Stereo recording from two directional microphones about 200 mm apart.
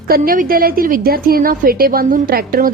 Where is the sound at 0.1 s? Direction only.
45° right (ahead or behind).